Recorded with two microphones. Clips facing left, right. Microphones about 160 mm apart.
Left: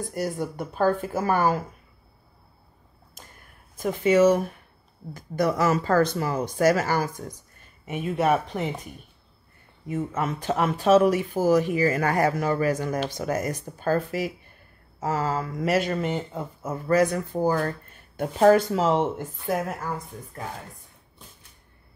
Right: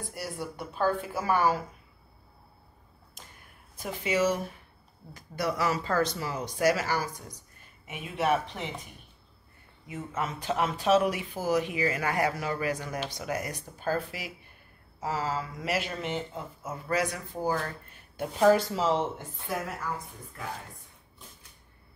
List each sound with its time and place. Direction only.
0.1 s speech: 45° left (ahead or behind)
3.7 s speech: 50° left (ahead or behind)
9.8 s speech: 50° left (ahead or behind)